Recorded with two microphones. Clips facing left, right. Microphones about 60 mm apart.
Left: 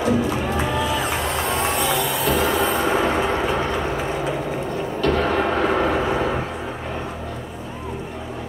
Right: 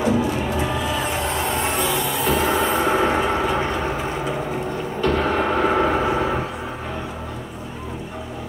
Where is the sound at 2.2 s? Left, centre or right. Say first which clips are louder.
Right 1 dB; right.